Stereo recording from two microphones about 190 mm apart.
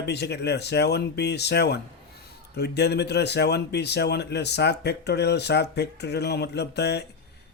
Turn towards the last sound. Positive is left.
turn(degrees=60)  # may be behind; listen again after turning